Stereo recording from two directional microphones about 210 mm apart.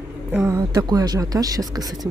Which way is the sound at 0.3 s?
10° right (ahead or behind).